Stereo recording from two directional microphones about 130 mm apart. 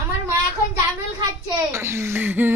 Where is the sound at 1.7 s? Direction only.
20° right (ahead or behind).